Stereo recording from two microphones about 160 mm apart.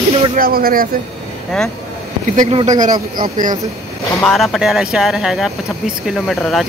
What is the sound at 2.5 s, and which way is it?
Speech, 50° right (ahead or behind).